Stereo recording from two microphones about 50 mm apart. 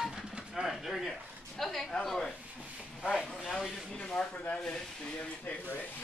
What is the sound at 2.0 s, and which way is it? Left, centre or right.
Speech, centre.